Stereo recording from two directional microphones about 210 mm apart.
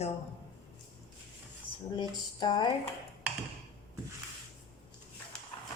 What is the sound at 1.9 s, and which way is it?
Speech, 20° left (ahead or behind).